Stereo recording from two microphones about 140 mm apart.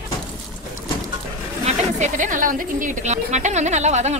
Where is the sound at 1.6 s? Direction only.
65° right (ahead or behind).